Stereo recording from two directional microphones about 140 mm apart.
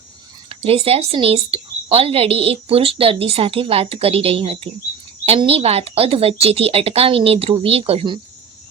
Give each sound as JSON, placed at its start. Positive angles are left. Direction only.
{"t": 0.6, "sound": "a woman's voice", "side_deg": -45}